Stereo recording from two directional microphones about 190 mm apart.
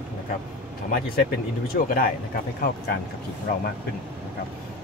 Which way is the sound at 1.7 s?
50° left (ahead or behind).